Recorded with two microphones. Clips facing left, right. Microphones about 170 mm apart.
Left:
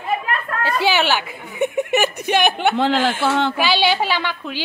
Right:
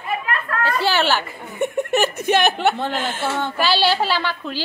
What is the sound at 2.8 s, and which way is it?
Speech, 90° left.